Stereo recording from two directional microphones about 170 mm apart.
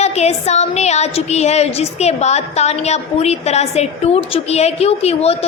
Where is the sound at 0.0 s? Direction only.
40° left (ahead or behind).